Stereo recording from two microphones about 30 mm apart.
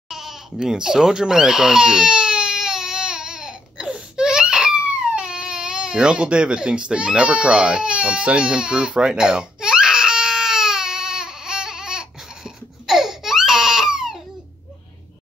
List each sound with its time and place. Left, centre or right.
0.1 s goat: centre
0.6 s speech: right
1.2 s baby cry: right
12.8 s baby cry: centre